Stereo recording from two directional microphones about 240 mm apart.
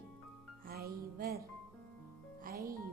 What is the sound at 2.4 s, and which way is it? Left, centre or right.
Speech, right.